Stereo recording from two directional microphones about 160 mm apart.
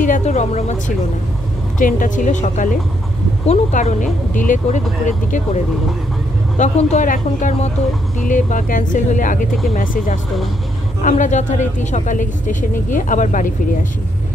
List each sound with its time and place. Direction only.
0.0 s speech: 50° left (ahead or behind)
1.8 s speech: 55° left (ahead or behind)
6.6 s speech: 45° left (ahead or behind)
11.0 s speech: 50° left (ahead or behind)